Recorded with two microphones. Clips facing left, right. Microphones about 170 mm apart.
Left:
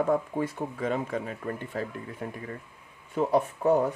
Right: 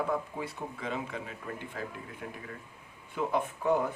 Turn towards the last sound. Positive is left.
turn(degrees=40)  # may be behind; listen again after turning